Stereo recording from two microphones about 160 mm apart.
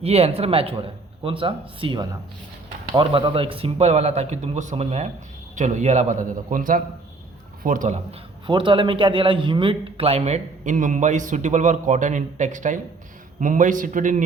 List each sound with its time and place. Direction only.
0.0 s a man's voice: 40° right (ahead or behind); by 7.9 s 55° right (ahead or behind)
8.4 s a man's voice: 30° right (ahead or behind); by 14.3 s 55° right (ahead or behind)